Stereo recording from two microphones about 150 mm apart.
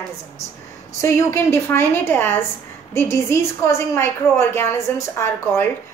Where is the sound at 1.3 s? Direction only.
15° left (ahead or behind).